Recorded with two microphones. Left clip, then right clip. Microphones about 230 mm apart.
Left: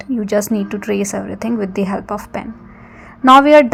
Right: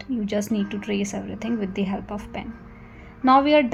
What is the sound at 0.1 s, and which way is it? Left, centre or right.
A woman's voice, left.